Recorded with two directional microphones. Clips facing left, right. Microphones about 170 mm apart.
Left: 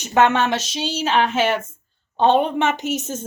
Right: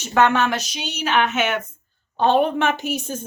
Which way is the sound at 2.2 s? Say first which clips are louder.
Left 1 dB; 20° left (ahead or behind).